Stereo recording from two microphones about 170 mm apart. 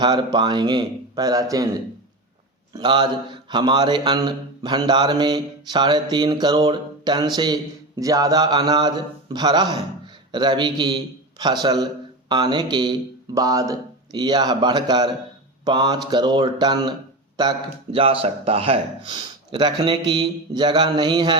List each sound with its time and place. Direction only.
0.0 s a man's voice: 25° right (ahead or behind)
2.7 s a man's voice: 25° right (ahead or behind)